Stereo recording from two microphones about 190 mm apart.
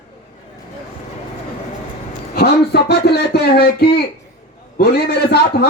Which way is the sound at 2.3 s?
55° left (ahead or behind).